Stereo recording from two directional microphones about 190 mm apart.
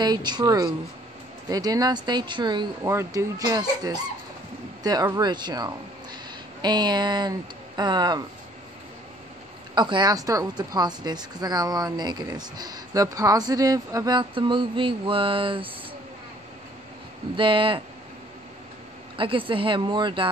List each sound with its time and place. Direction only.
0.0 s a woman's voice: 20° right (ahead or behind)
9.8 s a woman's voice: 25° right (ahead or behind)
17.4 s a woman's voice: 25° right (ahead or behind)
19.1 s a woman's voice: 30° right (ahead or behind)